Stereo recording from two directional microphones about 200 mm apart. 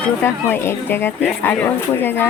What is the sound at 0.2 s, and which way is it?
Speech, 10° left (ahead or behind).